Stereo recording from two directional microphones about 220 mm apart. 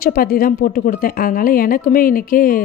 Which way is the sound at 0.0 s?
40° left (ahead or behind).